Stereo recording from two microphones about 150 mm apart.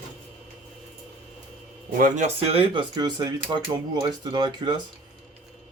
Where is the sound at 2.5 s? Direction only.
35° right (ahead or behind).